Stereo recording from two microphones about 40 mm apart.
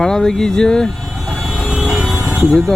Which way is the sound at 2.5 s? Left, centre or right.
Centre.